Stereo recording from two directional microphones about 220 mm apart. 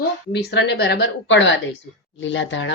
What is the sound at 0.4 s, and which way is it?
Speech, 50° left (ahead or behind).